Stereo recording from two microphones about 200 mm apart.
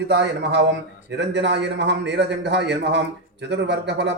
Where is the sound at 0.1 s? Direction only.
60° right (ahead or behind).